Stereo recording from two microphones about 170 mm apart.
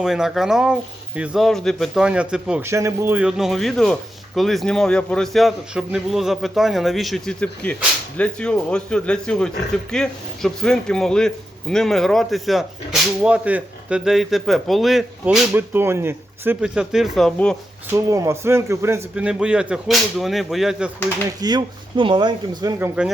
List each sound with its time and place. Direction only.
0.0 s speech: 5° right (ahead or behind)
2.6 s speech: 15° right (ahead or behind); by 17.6 s 5° left (ahead or behind)
17.9 s speech: 20° right (ahead or behind)
21.4 s speech: 25° right (ahead or behind)
23.0 s speech: 5° right (ahead or behind)